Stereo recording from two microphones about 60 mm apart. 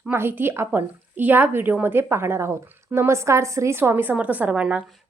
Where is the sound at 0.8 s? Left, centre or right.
Right.